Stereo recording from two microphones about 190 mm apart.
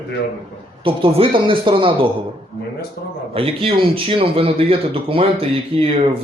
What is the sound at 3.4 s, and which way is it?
Speech, 30° right (ahead or behind).